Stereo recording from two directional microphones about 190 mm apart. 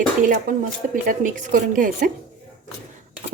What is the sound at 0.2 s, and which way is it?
Speech, 45° right (ahead or behind).